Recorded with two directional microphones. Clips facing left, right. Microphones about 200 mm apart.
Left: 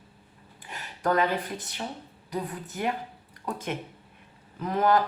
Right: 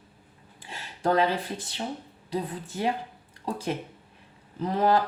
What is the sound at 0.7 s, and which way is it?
A woman's voice, 30° right (ahead or behind).